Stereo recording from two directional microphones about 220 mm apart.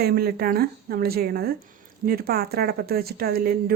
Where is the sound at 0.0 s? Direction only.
45° right (ahead or behind).